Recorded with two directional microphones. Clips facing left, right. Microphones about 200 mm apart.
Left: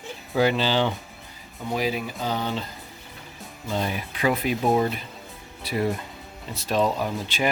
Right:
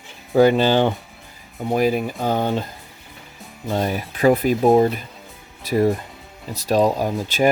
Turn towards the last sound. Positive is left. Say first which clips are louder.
# right 6 dB
turn(degrees=-45)  # may be behind; listen again after turning